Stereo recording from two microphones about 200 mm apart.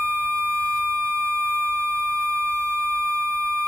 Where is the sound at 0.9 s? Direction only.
10° right (ahead or behind).